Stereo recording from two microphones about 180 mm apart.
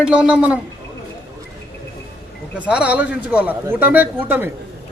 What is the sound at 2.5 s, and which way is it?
Speech, 5° right (ahead or behind).